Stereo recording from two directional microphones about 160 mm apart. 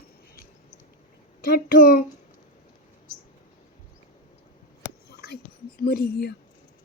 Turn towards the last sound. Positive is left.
turn(degrees=80)